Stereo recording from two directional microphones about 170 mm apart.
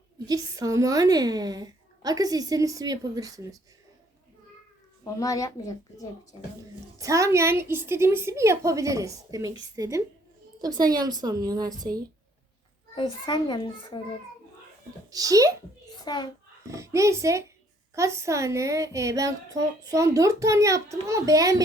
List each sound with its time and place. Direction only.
0.3 s a woman's voice: 20° right (ahead or behind)
5.2 s a child's voice: 20° left (ahead or behind)
7.0 s a child's voice: 20° right (ahead or behind)
13.0 s a child's voice: 25° left (ahead or behind)
15.1 s a woman's voice: 20° right (ahead or behind)
16.0 s a child's voice: 25° left (ahead or behind)
16.6 s a child's voice: 15° right (ahead or behind)